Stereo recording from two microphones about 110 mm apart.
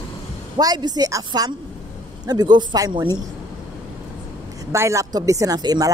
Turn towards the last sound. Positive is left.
turn(degrees=-35)  # may be behind; listen again after turning